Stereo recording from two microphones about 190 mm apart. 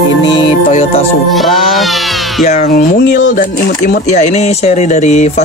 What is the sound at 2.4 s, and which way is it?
Speech, 40° left (ahead or behind).